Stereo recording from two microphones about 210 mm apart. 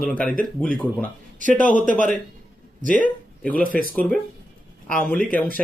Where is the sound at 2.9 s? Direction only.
40° left (ahead or behind).